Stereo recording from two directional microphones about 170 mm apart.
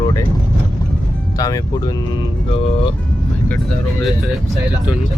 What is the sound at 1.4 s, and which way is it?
Speech, 20° left (ahead or behind).